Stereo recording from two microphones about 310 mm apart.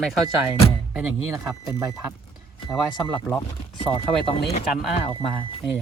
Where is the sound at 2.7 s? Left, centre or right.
Centre.